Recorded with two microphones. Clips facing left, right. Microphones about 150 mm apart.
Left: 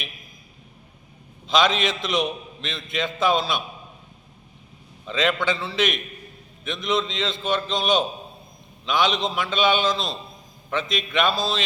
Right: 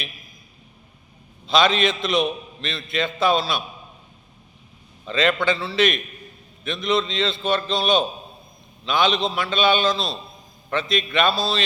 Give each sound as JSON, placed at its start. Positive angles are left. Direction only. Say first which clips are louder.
{"t": 1.5, "sound": "a man's voice", "louder": "right 2 dB", "side_deg": 15}
{"t": 5.5, "sound": "a man's voice", "louder": "right 3 dB", "side_deg": 15}